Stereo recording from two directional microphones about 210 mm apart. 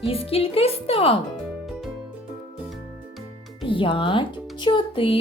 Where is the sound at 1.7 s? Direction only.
Centre (ahead or behind).